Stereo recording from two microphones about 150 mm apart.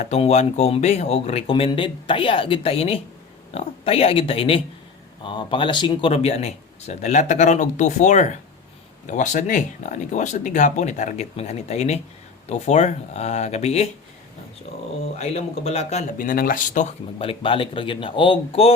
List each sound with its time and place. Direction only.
0.0 s speech: 45° left (ahead or behind)
15.2 s speech: 45° left (ahead or behind)
16.1 s speech: 70° left (ahead or behind)
17.2 s speech: 35° left (ahead or behind)